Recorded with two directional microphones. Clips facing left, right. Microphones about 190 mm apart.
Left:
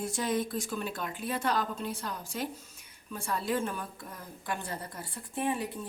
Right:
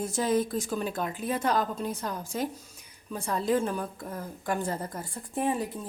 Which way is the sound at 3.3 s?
40° right (ahead or behind).